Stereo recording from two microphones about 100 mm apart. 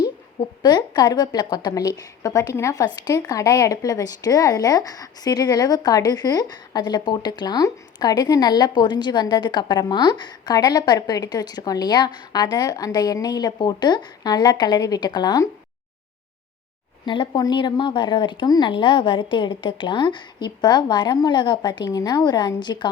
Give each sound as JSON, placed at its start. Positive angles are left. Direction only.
{"t": 0.6, "sound": "a woman's voice", "side_deg": 45}
{"t": 17.1, "sound": "a woman's voice", "side_deg": 55}
{"t": 18.7, "sound": "a woman's voice", "side_deg": 55}